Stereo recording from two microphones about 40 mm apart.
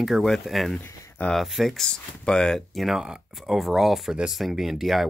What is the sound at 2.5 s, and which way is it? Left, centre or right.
Speech, centre.